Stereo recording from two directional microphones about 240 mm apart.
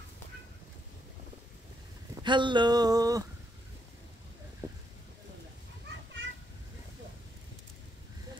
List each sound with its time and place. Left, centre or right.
2.2 s speech: centre